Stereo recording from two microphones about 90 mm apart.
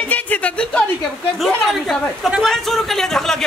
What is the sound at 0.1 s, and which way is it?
Music, 15° left (ahead or behind).